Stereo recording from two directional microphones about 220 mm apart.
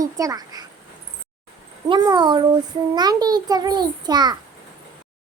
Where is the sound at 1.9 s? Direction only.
15° right (ahead or behind).